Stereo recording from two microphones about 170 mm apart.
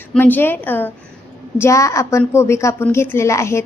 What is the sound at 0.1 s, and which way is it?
A woman's voice, 10° left (ahead or behind).